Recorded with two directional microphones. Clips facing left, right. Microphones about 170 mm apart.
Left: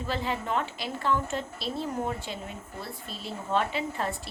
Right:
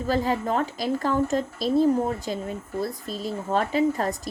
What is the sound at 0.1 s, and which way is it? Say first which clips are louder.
Speech: right 6 dB; 40° right (ahead or behind).